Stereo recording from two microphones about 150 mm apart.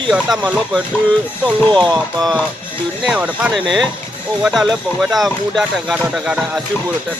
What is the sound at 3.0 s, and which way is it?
Speech, 10° right (ahead or behind).